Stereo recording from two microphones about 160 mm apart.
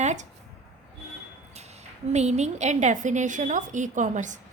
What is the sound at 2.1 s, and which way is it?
A woman's voice, 45° right (ahead or behind).